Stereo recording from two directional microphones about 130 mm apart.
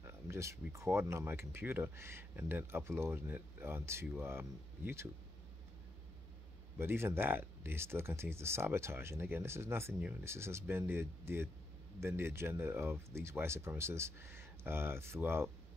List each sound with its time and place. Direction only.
0.0 s a sound: 20° right (ahead or behind)
0.7 s speech: 20° right (ahead or behind)
6.8 s speech: 15° right (ahead or behind)